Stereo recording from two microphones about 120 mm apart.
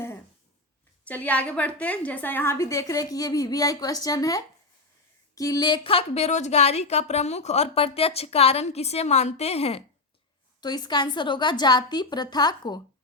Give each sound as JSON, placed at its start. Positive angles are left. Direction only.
{"t": 1.0, "sound": "a woman's voice", "side_deg": 15}
{"t": 10.6, "sound": "a woman's voice", "side_deg": 35}